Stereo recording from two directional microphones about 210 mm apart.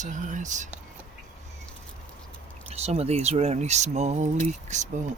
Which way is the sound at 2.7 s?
30° right (ahead or behind).